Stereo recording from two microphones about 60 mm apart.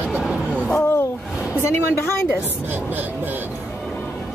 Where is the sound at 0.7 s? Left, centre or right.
Left.